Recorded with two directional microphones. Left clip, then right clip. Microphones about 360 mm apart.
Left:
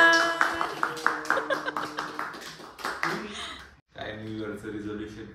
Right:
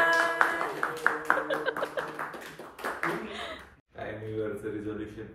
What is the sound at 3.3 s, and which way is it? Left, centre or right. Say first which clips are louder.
Sigh: even; centre.